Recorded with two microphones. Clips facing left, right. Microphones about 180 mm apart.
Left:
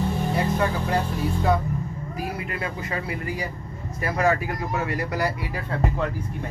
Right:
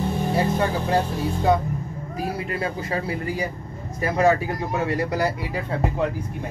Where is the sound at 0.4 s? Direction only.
30° right (ahead or behind).